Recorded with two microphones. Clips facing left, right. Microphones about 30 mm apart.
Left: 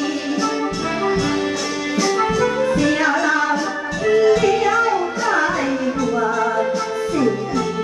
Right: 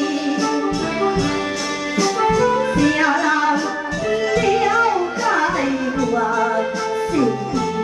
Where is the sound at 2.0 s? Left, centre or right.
Centre.